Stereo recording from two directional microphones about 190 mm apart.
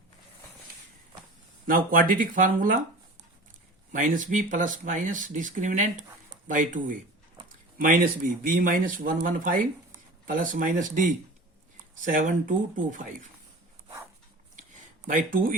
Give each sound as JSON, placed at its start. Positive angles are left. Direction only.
{"t": 1.6, "sound": "speech", "side_deg": -45}
{"t": 3.9, "sound": "speech", "side_deg": -45}
{"t": 15.0, "sound": "speech", "side_deg": -45}